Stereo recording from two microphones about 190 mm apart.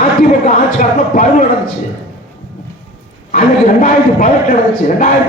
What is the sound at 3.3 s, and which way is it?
A man's voice, 45° left (ahead or behind).